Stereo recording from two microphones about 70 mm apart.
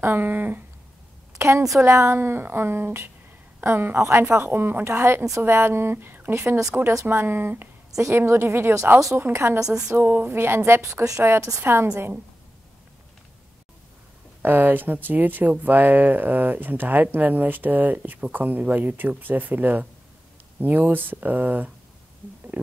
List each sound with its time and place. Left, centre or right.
0.0 s speech: right
1.8 s speech: right
2.1 s a woman's voice: right
5.4 s a woman's voice: right
10.0 s a woman's voice: right
14.4 s speech: right
22.5 s stomach rumble: right